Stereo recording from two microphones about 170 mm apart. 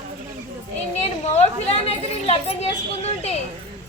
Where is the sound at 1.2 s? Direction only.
40° left (ahead or behind).